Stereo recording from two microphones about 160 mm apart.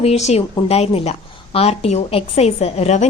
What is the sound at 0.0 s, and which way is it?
A woman's voice, 40° left (ahead or behind).